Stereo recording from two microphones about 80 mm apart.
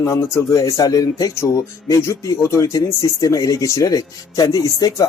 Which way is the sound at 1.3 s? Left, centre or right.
Left.